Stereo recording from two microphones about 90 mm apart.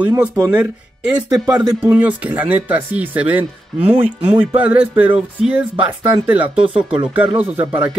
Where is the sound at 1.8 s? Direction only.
15° right (ahead or behind).